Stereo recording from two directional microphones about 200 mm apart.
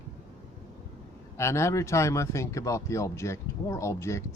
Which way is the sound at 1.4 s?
15° left (ahead or behind).